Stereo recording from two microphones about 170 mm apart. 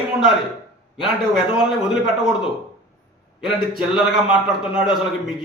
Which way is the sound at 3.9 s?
5° right (ahead or behind).